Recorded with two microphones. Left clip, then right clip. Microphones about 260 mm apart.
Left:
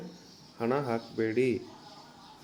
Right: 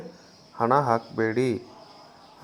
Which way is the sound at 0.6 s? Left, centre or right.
Centre.